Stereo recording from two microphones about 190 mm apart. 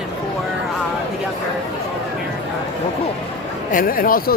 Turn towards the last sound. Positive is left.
turn(degrees=50)  # may be behind; listen again after turning